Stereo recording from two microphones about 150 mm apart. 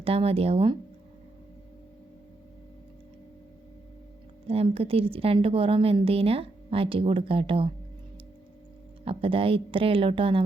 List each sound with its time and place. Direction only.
0.0 s a woman's voice: 40° right (ahead or behind)
4.4 s a woman's voice: 40° right (ahead or behind)
9.0 s a woman's voice: 40° right (ahead or behind)